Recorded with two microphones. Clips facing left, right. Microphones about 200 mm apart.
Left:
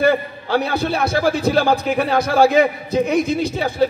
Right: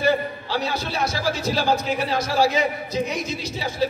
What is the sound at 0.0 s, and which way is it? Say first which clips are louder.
A man's voice: left 4 dB; 55° left (ahead or behind).